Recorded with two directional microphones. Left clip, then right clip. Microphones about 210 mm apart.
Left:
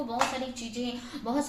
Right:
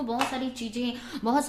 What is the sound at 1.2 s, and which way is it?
Speech, 50° right (ahead or behind).